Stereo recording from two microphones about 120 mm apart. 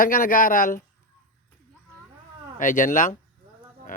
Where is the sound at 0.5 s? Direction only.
90° left.